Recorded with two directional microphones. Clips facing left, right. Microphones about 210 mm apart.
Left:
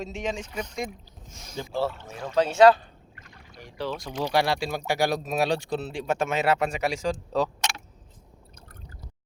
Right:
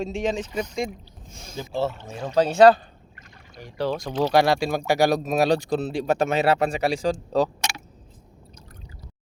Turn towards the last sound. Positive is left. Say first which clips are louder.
# right 4 dB
turn(degrees=-35)  # may be behind; listen again after turning